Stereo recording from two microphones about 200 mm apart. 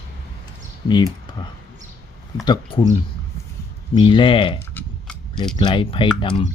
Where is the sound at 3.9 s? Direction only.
25° left (ahead or behind).